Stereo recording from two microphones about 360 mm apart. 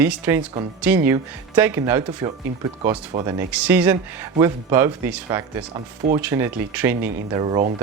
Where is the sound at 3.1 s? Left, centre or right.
Centre.